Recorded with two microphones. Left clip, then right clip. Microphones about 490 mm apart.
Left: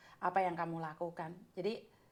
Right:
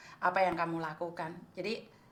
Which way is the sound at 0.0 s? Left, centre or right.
Left.